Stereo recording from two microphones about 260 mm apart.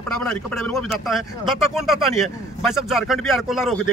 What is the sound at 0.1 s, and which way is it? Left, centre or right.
Speech, centre.